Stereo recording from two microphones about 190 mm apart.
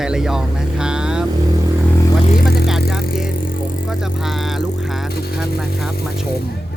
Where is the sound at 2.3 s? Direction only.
50° left (ahead or behind).